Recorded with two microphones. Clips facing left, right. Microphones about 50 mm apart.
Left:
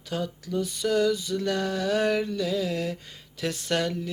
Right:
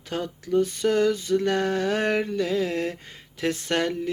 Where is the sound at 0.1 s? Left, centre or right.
Right.